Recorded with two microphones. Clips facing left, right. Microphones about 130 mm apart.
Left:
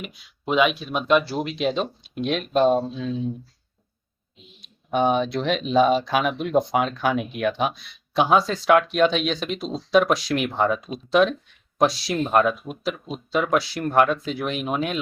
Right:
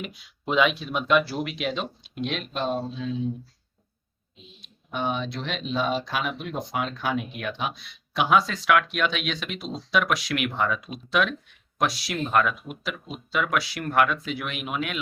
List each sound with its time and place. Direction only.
0.4 s speech: 10° left (ahead or behind); by 2.7 s 45° left (ahead or behind)
4.9 s speech: 50° left (ahead or behind)
8.1 s speech: 30° left (ahead or behind)